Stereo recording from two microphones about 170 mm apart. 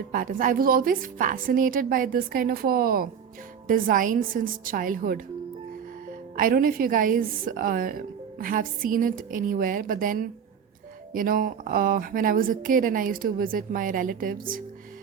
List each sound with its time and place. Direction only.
0.1 s a woman's voice: 55° right (ahead or behind)
6.3 s a woman's voice: 55° right (ahead or behind)